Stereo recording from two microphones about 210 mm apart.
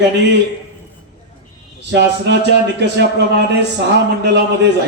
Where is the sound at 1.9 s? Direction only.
55° right (ahead or behind).